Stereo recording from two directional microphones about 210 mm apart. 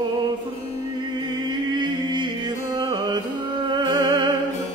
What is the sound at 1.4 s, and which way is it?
Music, 20° right (ahead or behind).